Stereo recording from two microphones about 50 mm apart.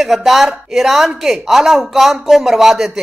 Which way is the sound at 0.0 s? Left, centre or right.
Centre.